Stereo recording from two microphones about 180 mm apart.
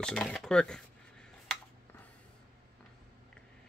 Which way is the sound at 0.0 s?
5° left (ahead or behind).